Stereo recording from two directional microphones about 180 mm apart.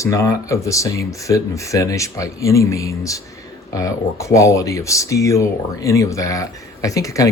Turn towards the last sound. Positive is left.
turn(degrees=20)  # may be behind; listen again after turning